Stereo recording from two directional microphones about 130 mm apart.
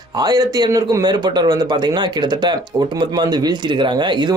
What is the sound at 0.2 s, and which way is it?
Speech, 30° right (ahead or behind).